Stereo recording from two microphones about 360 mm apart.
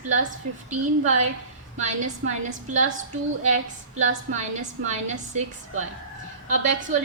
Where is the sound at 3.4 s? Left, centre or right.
Centre.